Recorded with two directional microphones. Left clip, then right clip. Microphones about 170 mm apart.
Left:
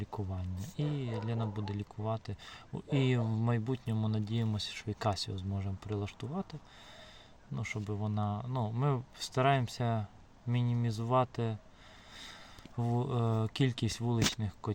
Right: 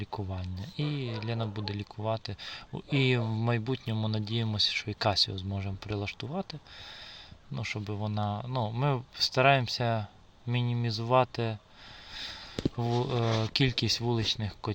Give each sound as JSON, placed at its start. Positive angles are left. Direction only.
{"t": 0.0, "sound": "speech", "side_deg": -20}